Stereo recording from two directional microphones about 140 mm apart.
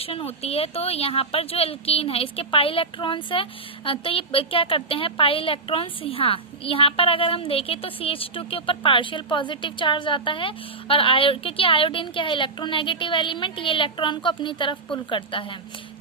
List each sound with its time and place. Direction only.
0.0 s a woman's voice: 45° left (ahead or behind)